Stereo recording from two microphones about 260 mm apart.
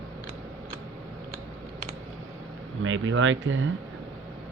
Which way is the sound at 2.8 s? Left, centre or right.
Right.